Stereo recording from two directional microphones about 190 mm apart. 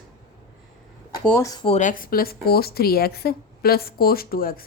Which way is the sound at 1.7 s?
40° left (ahead or behind).